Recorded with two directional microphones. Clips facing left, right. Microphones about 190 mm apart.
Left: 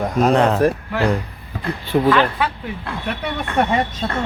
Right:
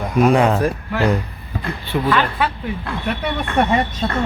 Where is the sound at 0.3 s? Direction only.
5° right (ahead or behind).